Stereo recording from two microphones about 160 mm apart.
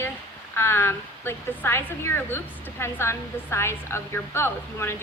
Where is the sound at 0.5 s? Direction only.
15° left (ahead or behind).